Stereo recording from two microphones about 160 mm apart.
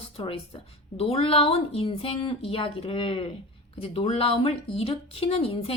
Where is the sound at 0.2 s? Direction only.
35° left (ahead or behind).